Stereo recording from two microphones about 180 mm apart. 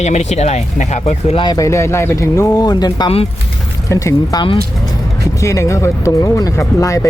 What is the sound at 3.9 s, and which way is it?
Speech, 15° left (ahead or behind).